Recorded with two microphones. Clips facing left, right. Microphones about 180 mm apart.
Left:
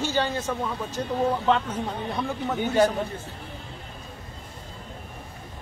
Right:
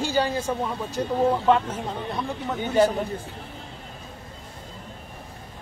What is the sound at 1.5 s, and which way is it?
A man's voice, 5° right (ahead or behind).